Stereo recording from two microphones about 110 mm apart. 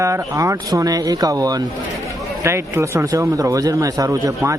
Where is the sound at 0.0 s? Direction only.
30° right (ahead or behind).